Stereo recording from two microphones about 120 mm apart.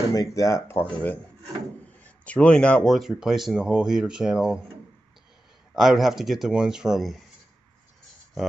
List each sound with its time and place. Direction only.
0.1 s speech: 25° left (ahead or behind); by 4.6 s 5° right (ahead or behind)
5.8 s speech: centre (ahead or behind)